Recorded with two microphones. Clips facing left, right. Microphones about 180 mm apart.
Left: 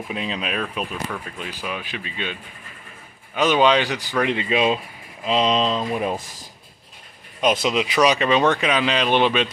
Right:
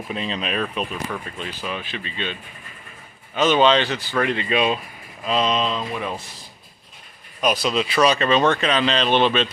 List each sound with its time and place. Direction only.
0.1 s speech: 10° left (ahead or behind); by 6.2 s 35° left (ahead or behind)
7.4 s speech: 20° left (ahead or behind)